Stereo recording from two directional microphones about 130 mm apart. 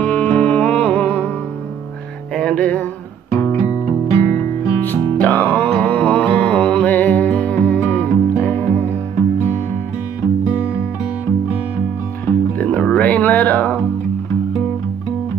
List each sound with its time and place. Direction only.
0.0 s music: 10° left (ahead or behind)
2.3 s music: 10° left (ahead or behind)
3.3 s music: 25° left (ahead or behind)
5.2 s mantra: 15° left (ahead or behind)
12.3 s music: 10° left (ahead or behind)